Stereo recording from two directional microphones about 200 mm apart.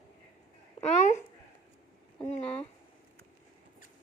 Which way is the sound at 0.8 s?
35° left (ahead or behind).